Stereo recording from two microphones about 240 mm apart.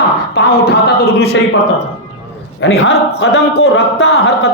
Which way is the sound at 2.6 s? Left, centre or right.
Left.